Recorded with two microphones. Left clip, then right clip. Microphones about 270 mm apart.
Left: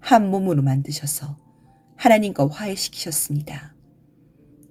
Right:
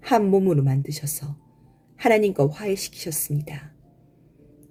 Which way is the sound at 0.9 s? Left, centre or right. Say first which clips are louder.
Left 4 dB; left.